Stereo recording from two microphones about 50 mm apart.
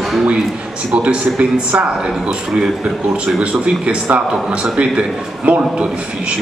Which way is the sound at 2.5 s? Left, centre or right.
Centre.